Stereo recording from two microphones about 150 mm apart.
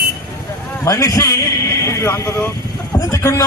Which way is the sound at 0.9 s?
20° left (ahead or behind).